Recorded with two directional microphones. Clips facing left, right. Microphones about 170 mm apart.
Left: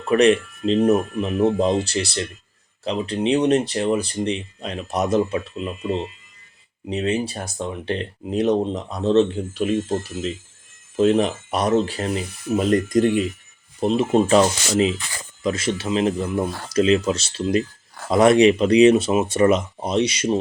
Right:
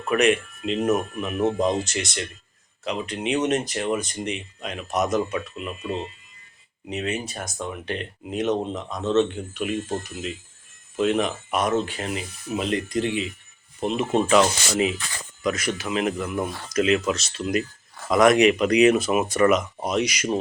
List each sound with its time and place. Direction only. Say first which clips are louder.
0.1 s speech: left 5 dB; 35° left (ahead or behind)
13.8 s speech: left 5 dB; 35° left (ahead or behind)